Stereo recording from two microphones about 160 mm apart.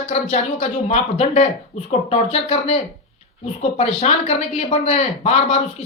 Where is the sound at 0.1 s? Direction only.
45° left (ahead or behind).